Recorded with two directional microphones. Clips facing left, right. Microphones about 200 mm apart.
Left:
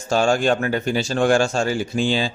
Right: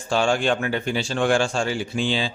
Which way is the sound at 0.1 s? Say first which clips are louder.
Left 3 dB; 40° left (ahead or behind).